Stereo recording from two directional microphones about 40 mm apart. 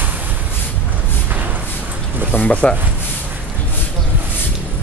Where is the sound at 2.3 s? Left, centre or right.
Left.